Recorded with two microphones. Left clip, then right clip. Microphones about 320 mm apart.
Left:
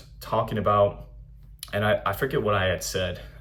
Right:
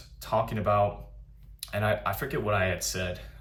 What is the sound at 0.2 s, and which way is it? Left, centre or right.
Speech, centre.